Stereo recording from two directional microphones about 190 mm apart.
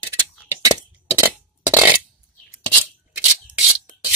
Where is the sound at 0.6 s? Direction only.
20° right (ahead or behind).